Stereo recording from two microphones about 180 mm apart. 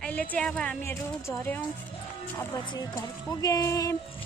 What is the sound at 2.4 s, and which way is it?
Speech, 20° left (ahead or behind).